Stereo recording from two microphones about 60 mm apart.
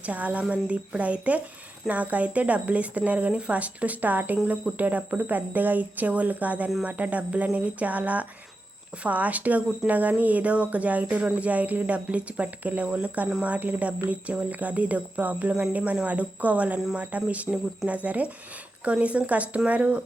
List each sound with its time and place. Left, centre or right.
0.0 s speech: right